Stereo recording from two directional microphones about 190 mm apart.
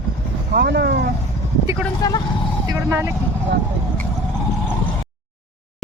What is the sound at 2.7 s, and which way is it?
Vehicle, 15° right (ahead or behind).